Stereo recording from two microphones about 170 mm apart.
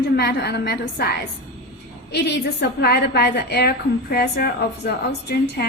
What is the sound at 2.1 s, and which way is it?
A woman's voice, 75° left (ahead or behind).